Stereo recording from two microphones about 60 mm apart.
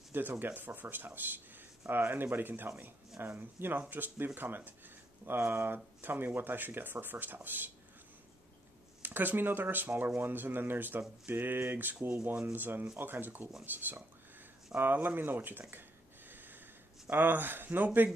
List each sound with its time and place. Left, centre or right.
0.1 s speech: right
9.0 s speech: right
16.3 s snort: right
17.1 s speech: right